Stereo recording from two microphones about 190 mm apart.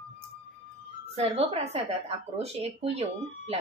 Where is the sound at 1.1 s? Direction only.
35° right (ahead or behind).